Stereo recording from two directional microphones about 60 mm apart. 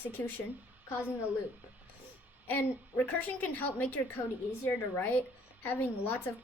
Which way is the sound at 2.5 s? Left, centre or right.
Left.